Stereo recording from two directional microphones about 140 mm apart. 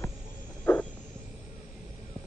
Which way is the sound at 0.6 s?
10° left (ahead or behind).